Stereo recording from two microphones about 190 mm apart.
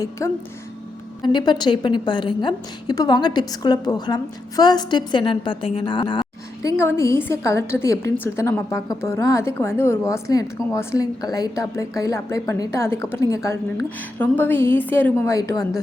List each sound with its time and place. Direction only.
0.2 s a woman's voice: 15° left (ahead or behind)